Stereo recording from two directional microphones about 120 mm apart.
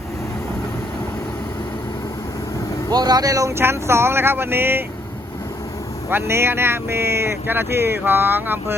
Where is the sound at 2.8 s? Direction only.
35° right (ahead or behind); by 4.8 s 20° right (ahead or behind).